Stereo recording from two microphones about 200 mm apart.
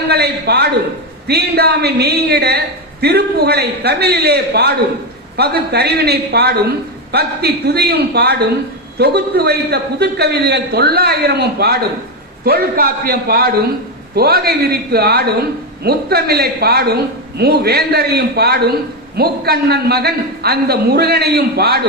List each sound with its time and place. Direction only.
0.1 s a man's voice: 55° right (ahead or behind)